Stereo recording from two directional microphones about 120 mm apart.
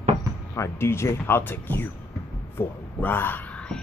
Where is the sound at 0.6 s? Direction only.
20° left (ahead or behind).